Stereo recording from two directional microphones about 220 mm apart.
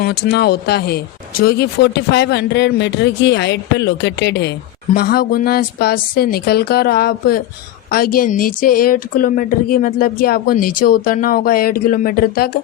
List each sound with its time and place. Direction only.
0.0 s speech: 45° left (ahead or behind)